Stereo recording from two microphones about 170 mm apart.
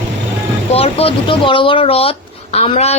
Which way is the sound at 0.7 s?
35° left (ahead or behind).